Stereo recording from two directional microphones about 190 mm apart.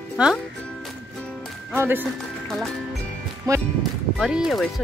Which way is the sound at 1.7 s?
10° right (ahead or behind).